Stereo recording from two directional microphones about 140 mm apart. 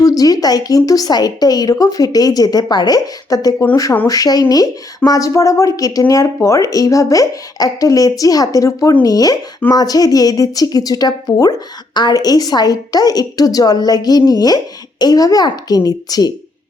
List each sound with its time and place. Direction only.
0.0 s speech: 25° left (ahead or behind)